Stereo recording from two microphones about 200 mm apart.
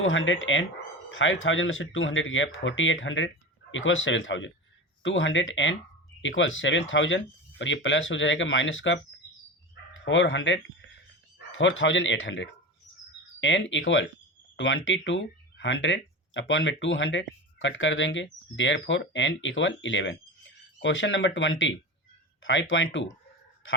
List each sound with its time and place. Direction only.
0.0 s speech: 75° left (ahead or behind)
10.0 s speech: 65° left (ahead or behind)